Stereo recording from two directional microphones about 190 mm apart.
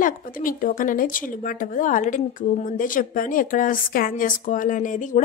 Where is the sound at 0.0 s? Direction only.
45° left (ahead or behind).